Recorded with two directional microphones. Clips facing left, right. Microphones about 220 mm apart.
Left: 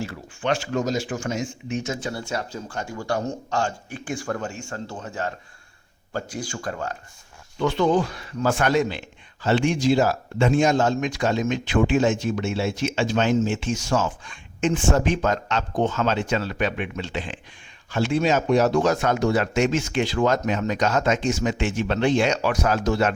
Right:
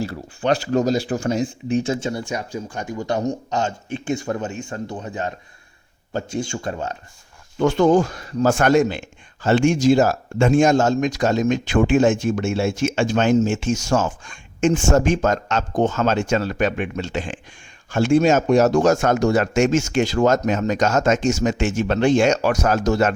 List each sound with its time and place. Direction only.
0.0 s speech: 35° right (ahead or behind)
7.6 s a man's voice: 45° right (ahead or behind)